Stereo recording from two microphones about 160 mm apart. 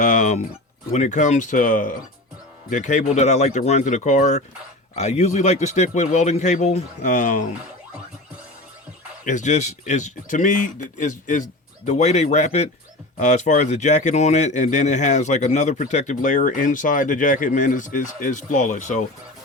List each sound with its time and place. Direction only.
0.0 s a sound: 50° left (ahead or behind)
0.9 s speech: 50° left (ahead or behind)
9.2 s speech: 50° left (ahead or behind)